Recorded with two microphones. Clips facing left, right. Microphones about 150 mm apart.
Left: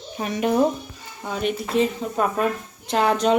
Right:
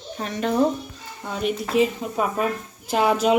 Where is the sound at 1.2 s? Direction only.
Centre (ahead or behind).